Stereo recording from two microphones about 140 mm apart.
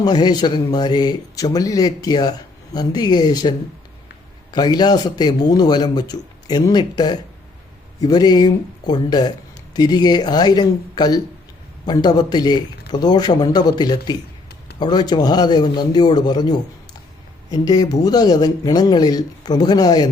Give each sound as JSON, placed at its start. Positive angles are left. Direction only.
{"t": 0.0, "sound": "speech", "side_deg": 30}
{"t": 4.5, "sound": "speech", "side_deg": 30}